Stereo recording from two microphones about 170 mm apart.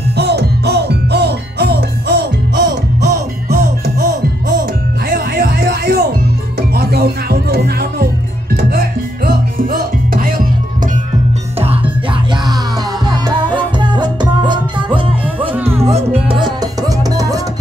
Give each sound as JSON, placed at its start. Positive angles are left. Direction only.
{"t": 0.2, "sound": "music", "side_deg": -75}
{"t": 5.1, "sound": "music", "side_deg": -60}
{"t": 13.0, "sound": "music", "side_deg": -25}
{"t": 15.5, "sound": "music", "side_deg": -15}
{"t": 15.9, "sound": "music", "side_deg": -40}